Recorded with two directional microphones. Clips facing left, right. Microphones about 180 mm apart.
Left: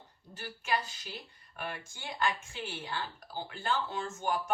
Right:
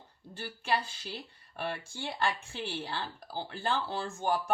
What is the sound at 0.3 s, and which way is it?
Speech, 30° right (ahead or behind).